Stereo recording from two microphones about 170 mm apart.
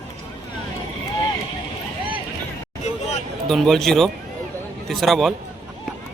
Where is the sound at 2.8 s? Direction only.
40° left (ahead or behind).